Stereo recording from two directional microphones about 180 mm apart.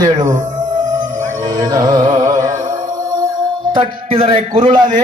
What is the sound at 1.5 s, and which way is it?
Music, 20° right (ahead or behind).